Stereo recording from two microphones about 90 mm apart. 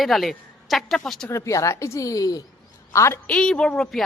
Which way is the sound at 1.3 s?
35° left (ahead or behind).